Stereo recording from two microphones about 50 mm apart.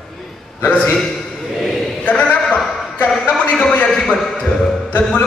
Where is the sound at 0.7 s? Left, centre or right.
Left.